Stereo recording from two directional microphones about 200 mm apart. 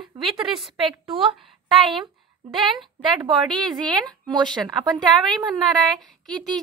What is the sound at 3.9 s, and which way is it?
Speech, 20° right (ahead or behind).